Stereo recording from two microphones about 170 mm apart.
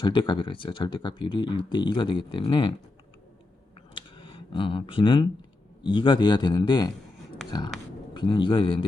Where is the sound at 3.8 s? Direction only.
30° left (ahead or behind).